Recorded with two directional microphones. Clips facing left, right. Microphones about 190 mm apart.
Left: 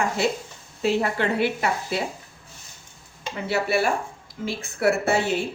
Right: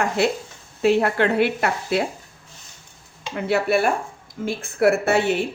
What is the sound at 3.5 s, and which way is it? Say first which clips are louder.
A woman's voice: right 3 dB; 55° right (ahead or behind).